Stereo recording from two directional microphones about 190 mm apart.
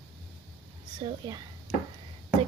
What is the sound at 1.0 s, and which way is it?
Speech, 20° right (ahead or behind).